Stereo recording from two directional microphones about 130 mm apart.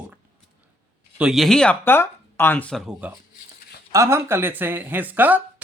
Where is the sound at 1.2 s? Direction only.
Centre (ahead or behind).